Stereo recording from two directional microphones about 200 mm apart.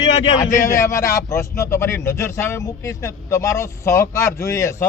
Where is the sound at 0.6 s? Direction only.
15° left (ahead or behind).